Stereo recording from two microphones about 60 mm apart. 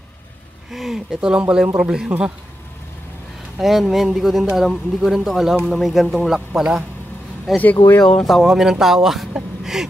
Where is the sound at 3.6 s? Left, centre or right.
Centre.